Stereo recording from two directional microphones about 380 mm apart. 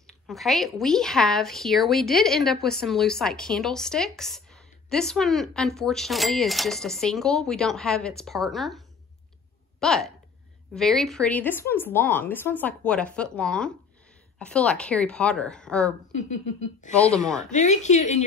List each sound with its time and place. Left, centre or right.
0.0 s speech: centre
16.2 s a woman's voice: centre